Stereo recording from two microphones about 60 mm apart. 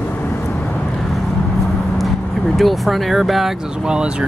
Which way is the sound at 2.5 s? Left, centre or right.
Centre.